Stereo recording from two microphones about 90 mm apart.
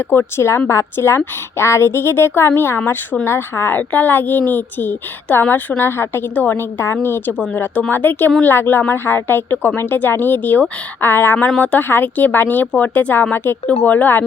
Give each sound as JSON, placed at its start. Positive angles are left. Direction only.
{"t": 0.1, "sound": "a woman's voice", "side_deg": 30}